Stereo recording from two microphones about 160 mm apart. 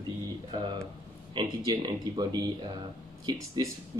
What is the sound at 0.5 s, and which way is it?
Speech, 30° right (ahead or behind).